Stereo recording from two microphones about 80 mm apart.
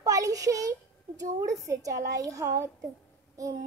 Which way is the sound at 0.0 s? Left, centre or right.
Right.